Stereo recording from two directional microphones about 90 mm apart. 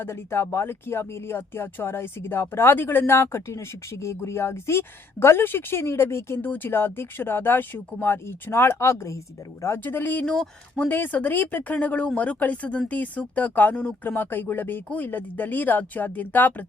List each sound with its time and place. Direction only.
0.0 s speech: 30° left (ahead or behind)
9.8 s speech: 20° left (ahead or behind)
10.2 s speech: 5° left (ahead or behind)
10.8 s speech: 20° left (ahead or behind)